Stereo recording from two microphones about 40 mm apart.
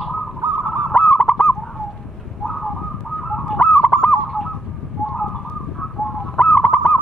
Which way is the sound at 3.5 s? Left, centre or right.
Left.